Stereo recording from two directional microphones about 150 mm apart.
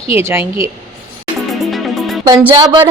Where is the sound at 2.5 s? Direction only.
25° right (ahead or behind).